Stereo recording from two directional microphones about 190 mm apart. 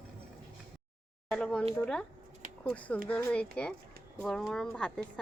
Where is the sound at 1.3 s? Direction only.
5° left (ahead or behind).